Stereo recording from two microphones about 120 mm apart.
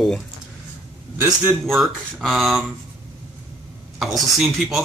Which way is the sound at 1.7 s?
Centre (ahead or behind).